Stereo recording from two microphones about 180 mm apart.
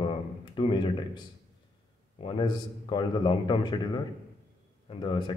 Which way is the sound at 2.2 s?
25° left (ahead or behind).